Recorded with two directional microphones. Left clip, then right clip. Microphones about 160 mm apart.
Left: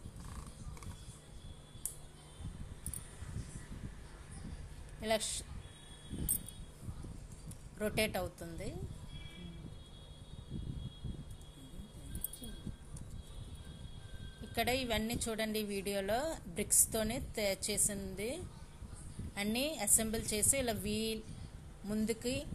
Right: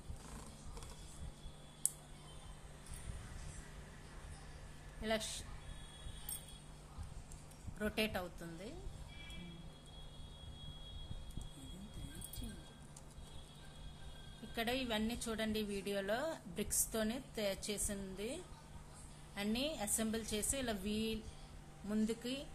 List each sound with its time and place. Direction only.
5.0 s a woman's voice: 25° left (ahead or behind)
7.8 s a woman's voice: 20° left (ahead or behind)
14.5 s a woman's voice: 25° left (ahead or behind)